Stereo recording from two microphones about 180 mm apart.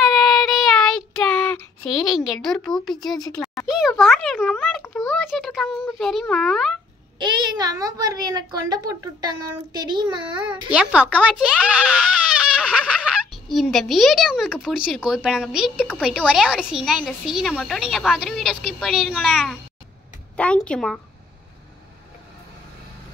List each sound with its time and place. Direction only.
0.0 s child singing: centre (ahead or behind)
3.3 s a sound: centre (ahead or behind)
4.0 s a woman's voice: centre (ahead or behind)
7.3 s a child's voice: 20° right (ahead or behind)
10.7 s speech: 5° right (ahead or behind)
11.4 s baby cry: 5° right (ahead or behind)
15.0 s a woman's voice: 5° right (ahead or behind)